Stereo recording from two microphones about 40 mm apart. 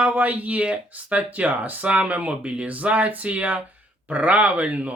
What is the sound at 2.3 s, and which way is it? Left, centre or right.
Speech, right.